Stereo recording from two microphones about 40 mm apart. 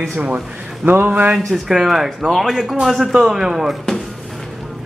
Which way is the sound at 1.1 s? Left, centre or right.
Right.